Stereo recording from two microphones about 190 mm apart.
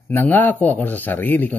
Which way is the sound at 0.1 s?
10° left (ahead or behind).